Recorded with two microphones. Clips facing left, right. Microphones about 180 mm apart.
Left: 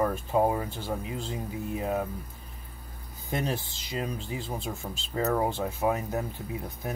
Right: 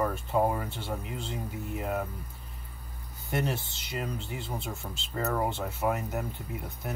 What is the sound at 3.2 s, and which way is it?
Speech, 15° left (ahead or behind).